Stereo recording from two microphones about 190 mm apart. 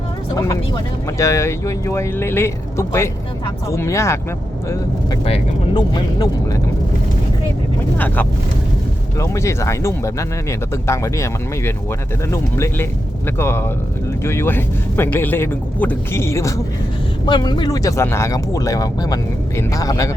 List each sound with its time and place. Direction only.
0.3 s speech: 15° left (ahead or behind)
5.2 s speech: 25° left (ahead or behind)
7.9 s speech: 10° left (ahead or behind)